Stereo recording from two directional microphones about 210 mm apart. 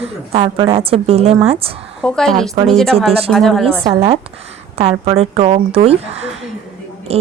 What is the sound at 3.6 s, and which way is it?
Speech, 25° right (ahead or behind).